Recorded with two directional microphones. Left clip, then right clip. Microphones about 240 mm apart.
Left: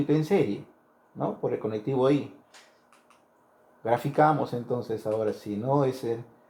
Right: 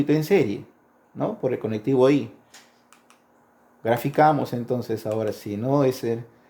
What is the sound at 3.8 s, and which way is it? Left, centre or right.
Speech, right.